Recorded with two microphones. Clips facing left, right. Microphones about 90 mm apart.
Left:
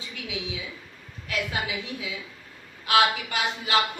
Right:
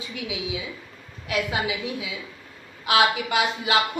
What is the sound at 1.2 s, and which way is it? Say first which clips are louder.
A woman's voice: right 4 dB; 15° right (ahead or behind).